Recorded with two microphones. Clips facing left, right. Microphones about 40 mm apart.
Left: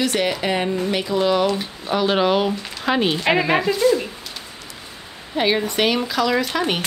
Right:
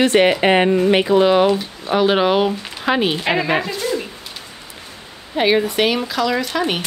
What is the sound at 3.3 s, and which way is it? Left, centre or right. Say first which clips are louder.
Speech: left 1 dB; centre.